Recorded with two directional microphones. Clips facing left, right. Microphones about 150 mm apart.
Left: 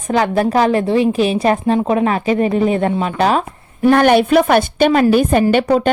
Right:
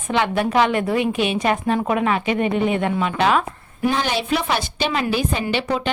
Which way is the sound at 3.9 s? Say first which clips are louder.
Left 10 dB; 60° left (ahead or behind).